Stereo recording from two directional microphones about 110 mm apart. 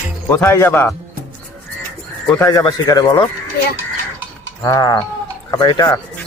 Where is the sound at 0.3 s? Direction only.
20° left (ahead or behind).